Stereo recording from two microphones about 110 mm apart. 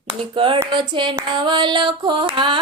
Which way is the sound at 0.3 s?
50° right (ahead or behind).